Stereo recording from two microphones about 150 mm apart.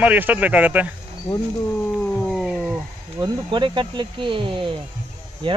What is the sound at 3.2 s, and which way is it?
Speech, 30° right (ahead or behind).